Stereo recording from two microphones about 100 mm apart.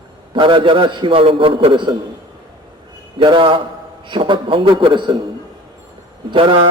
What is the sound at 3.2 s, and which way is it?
A man's voice, 60° right (ahead or behind).